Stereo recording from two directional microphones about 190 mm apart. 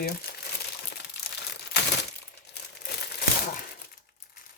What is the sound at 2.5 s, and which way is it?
Crumpling, 60° left (ahead or behind).